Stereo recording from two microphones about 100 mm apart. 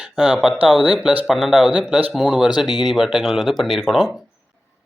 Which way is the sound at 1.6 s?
10° right (ahead or behind).